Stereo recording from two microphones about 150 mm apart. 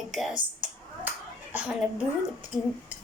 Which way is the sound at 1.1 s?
10° right (ahead or behind).